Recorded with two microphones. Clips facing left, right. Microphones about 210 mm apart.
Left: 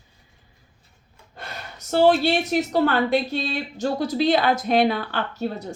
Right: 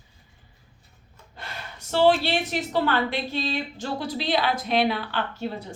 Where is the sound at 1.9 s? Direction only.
45° left (ahead or behind).